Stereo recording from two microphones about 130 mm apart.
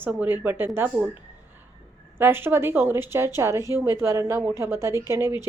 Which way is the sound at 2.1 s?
15° right (ahead or behind).